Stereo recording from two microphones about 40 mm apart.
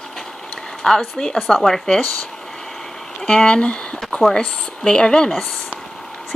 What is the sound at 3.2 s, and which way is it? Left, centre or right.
Speech, left.